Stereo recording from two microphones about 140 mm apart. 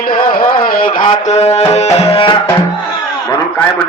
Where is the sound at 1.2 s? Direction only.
50° left (ahead or behind).